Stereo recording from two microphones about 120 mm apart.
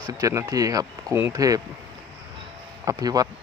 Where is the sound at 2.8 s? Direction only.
30° right (ahead or behind).